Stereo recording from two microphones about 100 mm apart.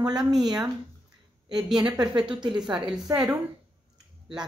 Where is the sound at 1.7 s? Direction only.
50° right (ahead or behind).